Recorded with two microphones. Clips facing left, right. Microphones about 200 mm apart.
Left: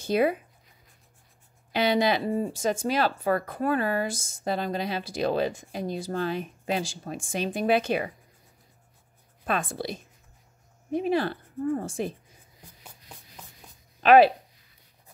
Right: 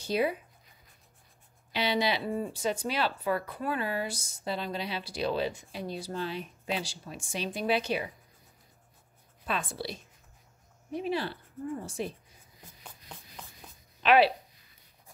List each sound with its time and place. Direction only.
0.0 s speech: 55° left (ahead or behind)
1.7 s speech: 50° left (ahead or behind)
9.5 s speech: 50° left (ahead or behind)
14.0 s speech: 45° left (ahead or behind)